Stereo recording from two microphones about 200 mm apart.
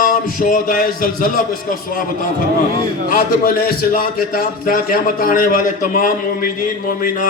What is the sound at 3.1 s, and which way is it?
A man's voice, 45° left (ahead or behind).